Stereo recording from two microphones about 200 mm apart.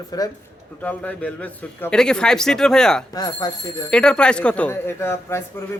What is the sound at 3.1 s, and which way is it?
Speech, 20° left (ahead or behind).